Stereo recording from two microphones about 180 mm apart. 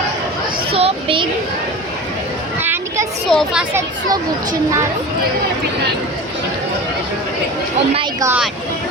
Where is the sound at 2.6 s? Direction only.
10° right (ahead or behind).